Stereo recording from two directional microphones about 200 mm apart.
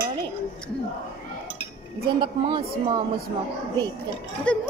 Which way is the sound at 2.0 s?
25° right (ahead or behind).